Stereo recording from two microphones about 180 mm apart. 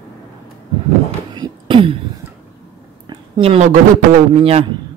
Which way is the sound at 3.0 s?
30° right (ahead or behind).